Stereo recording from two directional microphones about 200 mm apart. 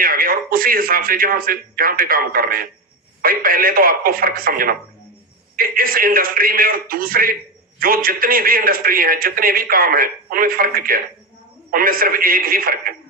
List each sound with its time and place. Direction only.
0.0 s a man's voice: 45° right (ahead or behind)